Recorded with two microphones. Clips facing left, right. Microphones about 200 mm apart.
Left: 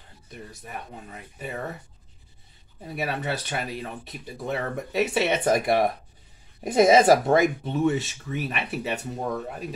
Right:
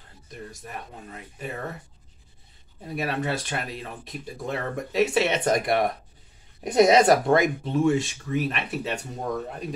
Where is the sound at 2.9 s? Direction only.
Centre (ahead or behind).